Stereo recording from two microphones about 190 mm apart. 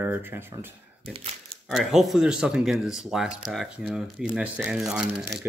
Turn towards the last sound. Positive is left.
turn(degrees=0)  # may be behind; listen again after turning